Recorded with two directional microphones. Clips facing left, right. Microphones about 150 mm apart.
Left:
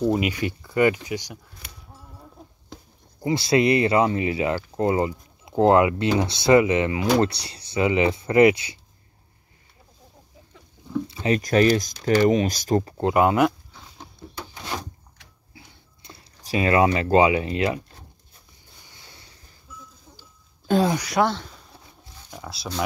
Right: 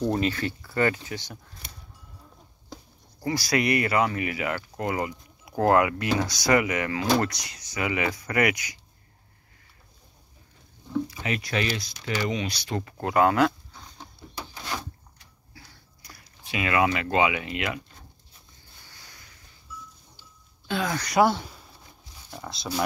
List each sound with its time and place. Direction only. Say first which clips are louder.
0.0 s speech: left 3 dB; 10° left (ahead or behind)
3.2 s speech: left 6 dB; 25° left (ahead or behind)
11.1 s speech: left 8 dB; 30° left (ahead or behind)
12.9 s speech: even; 20° left (ahead or behind)
14.5 s a sound: left 2 dB; 20° left (ahead or behind)
16.4 s speech: left 5 dB; 35° left (ahead or behind)
18.9 s a sound: left 2 dB; 25° left (ahead or behind)
20.7 s speech: left 9 dB; 45° left (ahead or behind)
21.0 s speech: right 1 dB; centre (ahead or behind)
21.3 s a sound: right 2 dB; 10° right (ahead or behind)
22.3 s speech: left 1 dB; centre (ahead or behind)